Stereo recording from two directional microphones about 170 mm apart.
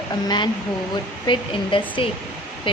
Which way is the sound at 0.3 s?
25° left (ahead or behind).